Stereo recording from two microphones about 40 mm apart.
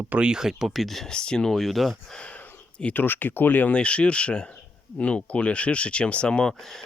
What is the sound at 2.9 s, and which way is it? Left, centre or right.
Speech, left.